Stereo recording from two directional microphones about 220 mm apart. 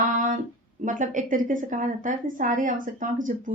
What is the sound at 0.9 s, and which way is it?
Speech, 35° right (ahead or behind).